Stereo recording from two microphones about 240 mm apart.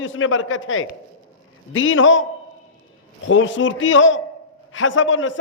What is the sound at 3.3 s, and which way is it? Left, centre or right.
A man's voice, left.